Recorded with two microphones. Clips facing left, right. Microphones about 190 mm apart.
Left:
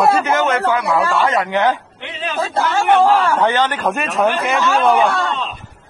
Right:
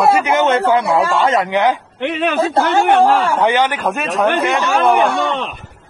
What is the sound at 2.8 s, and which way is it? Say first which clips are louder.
A man's voice: left 3 dB; 10° right (ahead or behind).